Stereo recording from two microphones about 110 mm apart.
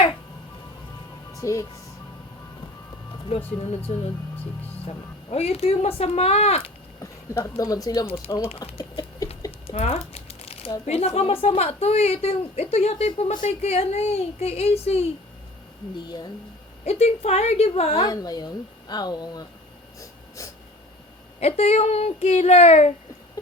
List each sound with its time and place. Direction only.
1.3 s speech: 30° left (ahead or behind)
3.2 s a woman's voice: 60° left (ahead or behind)
7.0 s speech: 25° left (ahead or behind)
8.4 s a woman's voice: 60° left (ahead or behind)
8.8 s a sound: 35° left (ahead or behind)
9.6 s a sound: 65° left (ahead or behind)
10.8 s a woman's voice: 65° left (ahead or behind)
16.0 s speech: 40° left (ahead or behind)
16.8 s speech: 70° left (ahead or behind)
18.0 s speech: 35° left (ahead or behind)
20.0 s a sound: 30° left (ahead or behind)
21.4 s speech: 70° left (ahead or behind)